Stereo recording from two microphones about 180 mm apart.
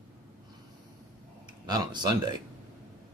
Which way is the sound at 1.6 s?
25° right (ahead or behind).